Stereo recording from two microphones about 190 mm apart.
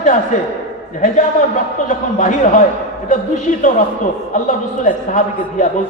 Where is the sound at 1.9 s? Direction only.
40° left (ahead or behind).